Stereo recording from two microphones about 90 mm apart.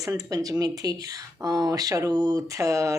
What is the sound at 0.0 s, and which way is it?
Speech, 40° right (ahead or behind).